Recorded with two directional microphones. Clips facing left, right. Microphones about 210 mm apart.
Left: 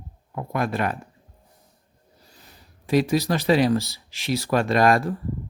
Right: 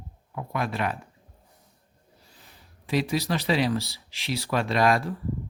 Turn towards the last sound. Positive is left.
turn(degrees=45)  # may be behind; listen again after turning